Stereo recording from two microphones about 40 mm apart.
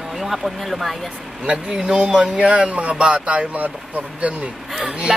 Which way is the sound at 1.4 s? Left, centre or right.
Right.